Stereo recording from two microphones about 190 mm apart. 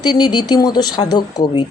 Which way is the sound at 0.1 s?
20° left (ahead or behind).